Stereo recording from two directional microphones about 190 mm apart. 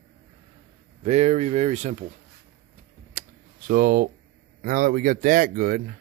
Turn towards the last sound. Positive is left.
turn(degrees=-50)  # may be behind; listen again after turning